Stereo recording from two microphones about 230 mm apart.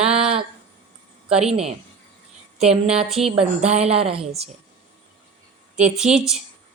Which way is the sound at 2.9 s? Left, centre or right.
Centre.